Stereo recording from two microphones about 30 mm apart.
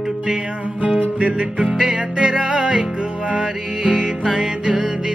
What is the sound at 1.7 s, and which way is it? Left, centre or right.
Music, right.